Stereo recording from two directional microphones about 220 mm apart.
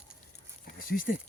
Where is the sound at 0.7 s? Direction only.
40° left (ahead or behind).